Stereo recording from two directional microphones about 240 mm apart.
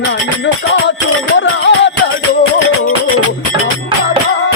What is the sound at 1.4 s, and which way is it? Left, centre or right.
Music, left.